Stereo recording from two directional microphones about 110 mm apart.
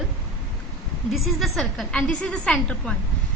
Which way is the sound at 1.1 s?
Centre (ahead or behind).